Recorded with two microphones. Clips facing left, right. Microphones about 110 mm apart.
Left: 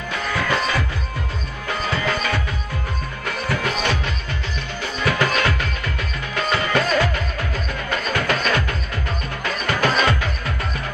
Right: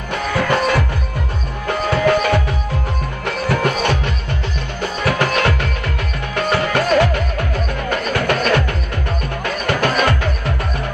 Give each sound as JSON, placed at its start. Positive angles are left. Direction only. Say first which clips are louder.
{"t": 0.1, "sound": "music", "louder": "right 5 dB", "side_deg": -55}
{"t": 5.0, "sound": "music", "louder": "right 3 dB", "side_deg": -60}